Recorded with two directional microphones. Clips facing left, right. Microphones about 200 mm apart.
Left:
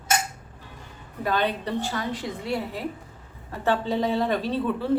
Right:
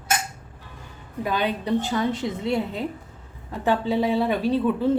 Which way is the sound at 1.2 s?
15° right (ahead or behind).